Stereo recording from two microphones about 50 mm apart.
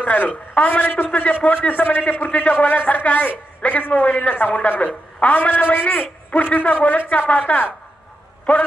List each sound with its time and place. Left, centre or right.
0.0 s a woman's voice: left